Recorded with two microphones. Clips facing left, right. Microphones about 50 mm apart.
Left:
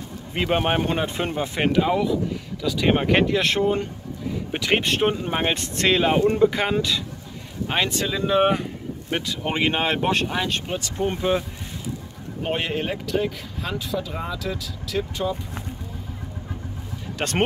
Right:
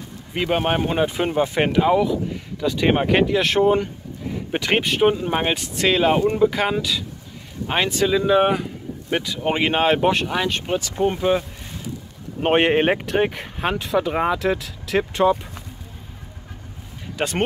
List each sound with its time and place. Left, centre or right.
0.3 s speech: centre
3.0 s speech: centre
3.5 s speech: right
4.7 s speech: centre
7.6 s speech: centre
9.3 s speech: centre
12.4 s speech: right
17.2 s speech: centre